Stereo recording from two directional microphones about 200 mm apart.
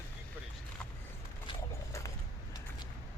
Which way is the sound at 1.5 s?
15° left (ahead or behind).